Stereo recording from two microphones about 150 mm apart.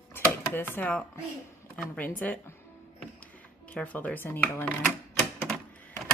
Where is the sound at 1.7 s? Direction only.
10° left (ahead or behind).